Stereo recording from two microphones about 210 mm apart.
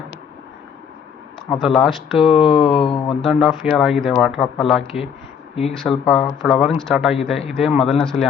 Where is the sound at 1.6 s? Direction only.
Centre (ahead or behind).